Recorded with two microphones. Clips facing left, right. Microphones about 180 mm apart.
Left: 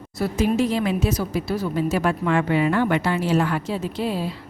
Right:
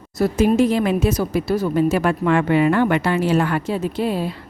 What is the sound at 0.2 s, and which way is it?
A woman's voice, 50° right (ahead or behind).